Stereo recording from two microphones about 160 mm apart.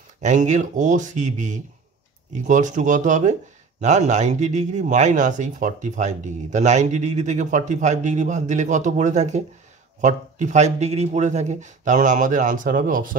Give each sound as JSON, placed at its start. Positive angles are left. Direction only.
{"t": 0.2, "sound": "speech", "side_deg": -50}